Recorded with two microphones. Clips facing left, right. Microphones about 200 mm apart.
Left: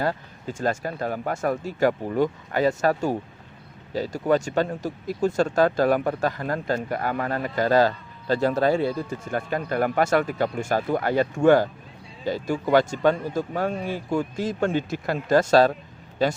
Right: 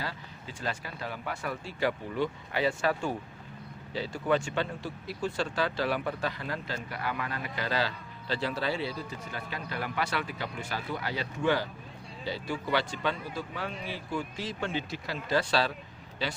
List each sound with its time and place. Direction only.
0.0 s speech: 50° left (ahead or behind)